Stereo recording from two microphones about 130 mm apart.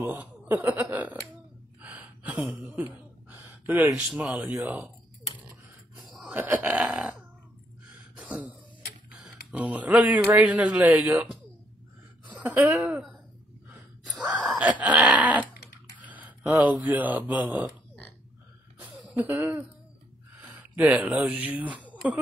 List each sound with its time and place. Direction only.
0.0 s a sound: 15° right (ahead or behind)
4.6 s burping: 15° right (ahead or behind)
6.3 s burping: 15° right (ahead or behind)
8.2 s throat clearing: 10° right (ahead or behind)
9.1 s speech: 5° right (ahead or behind)
12.4 s burping: 10° right (ahead or behind)
14.2 s a sound: 5° right (ahead or behind)
16.8 s burping: 15° right (ahead or behind)
19.1 s burping: 15° right (ahead or behind)
20.5 s speech: 15° right (ahead or behind)